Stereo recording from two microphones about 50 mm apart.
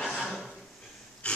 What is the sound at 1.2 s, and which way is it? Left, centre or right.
Wheeze, left.